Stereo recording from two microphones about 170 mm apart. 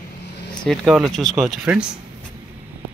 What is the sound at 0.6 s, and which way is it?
Speech, 5° right (ahead or behind).